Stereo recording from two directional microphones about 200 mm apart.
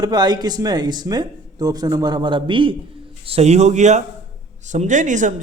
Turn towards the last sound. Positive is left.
turn(degrees=-40)  # may be behind; listen again after turning